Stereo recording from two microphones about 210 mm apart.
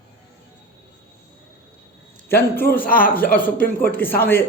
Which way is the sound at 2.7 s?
45° left (ahead or behind).